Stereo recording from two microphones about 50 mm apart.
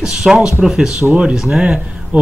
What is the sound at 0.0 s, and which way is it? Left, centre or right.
Speech, centre.